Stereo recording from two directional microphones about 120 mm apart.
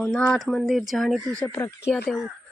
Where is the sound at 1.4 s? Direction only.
20° left (ahead or behind).